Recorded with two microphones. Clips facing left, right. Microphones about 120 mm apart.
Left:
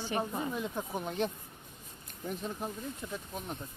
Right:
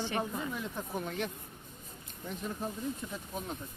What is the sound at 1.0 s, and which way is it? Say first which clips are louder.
Speech: left 6 dB; 25° left (ahead or behind).